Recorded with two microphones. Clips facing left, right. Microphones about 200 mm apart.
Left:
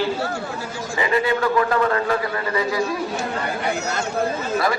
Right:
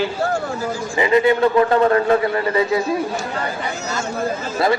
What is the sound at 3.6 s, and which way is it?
Speech, 60° left (ahead or behind).